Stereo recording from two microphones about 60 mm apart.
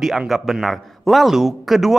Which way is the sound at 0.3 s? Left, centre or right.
Centre.